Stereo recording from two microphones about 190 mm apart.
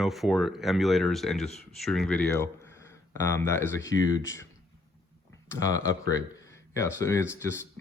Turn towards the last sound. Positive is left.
turn(degrees=15)  # may be behind; listen again after turning